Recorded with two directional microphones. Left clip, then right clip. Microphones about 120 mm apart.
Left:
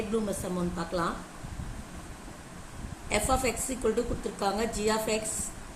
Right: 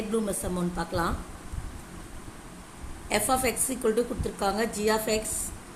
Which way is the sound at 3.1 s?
35° right (ahead or behind).